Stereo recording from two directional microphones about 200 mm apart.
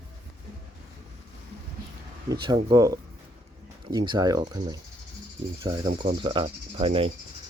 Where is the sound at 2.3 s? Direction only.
20° right (ahead or behind).